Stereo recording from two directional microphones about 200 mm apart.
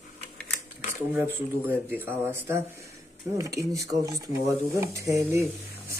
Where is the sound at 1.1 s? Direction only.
10° right (ahead or behind).